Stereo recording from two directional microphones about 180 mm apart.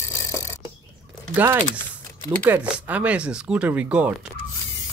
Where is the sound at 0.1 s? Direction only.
15° left (ahead or behind).